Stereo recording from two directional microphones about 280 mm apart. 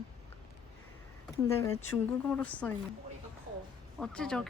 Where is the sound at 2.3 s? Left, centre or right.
Centre.